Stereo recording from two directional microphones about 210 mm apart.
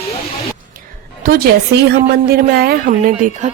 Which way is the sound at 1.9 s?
50° right (ahead or behind).